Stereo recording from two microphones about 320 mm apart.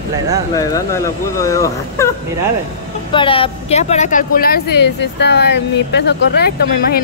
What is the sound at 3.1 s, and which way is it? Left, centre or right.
Speech, centre.